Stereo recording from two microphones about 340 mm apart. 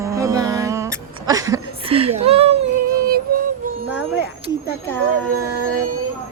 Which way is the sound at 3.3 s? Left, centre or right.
Right.